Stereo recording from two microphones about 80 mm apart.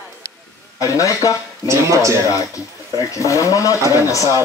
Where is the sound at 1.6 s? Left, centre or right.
Right.